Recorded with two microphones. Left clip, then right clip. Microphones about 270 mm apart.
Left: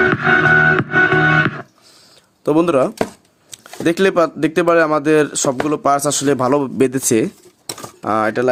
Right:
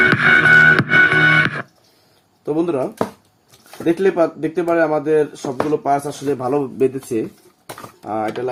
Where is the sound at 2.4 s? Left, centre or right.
Left.